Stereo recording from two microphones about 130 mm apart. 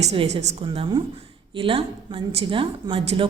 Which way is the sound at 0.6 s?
40° right (ahead or behind).